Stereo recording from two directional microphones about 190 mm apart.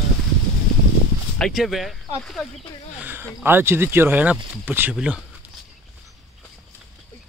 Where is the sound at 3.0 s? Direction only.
10° right (ahead or behind).